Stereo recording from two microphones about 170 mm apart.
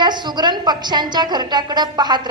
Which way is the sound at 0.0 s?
25° right (ahead or behind).